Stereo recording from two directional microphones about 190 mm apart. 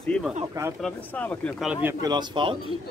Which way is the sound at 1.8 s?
20° right (ahead or behind).